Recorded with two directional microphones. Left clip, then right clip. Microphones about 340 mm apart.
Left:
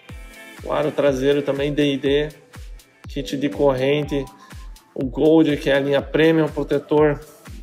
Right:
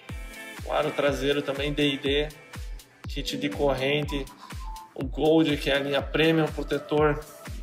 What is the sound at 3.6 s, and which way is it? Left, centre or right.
Speech, left.